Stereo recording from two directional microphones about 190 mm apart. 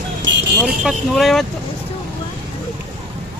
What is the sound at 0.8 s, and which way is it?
Speech, centre (ahead or behind).